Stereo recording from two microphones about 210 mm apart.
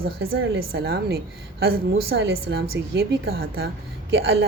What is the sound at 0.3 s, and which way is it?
A woman's voice, 50° right (ahead or behind).